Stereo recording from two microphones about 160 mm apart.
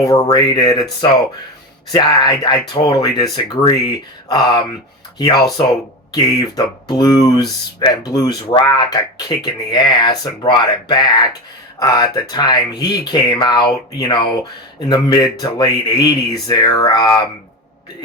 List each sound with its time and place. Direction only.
0.0 s speech: 20° left (ahead or behind)